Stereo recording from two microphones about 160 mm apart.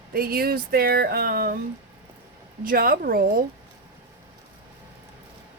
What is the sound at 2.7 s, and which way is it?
Speech, 65° right (ahead or behind).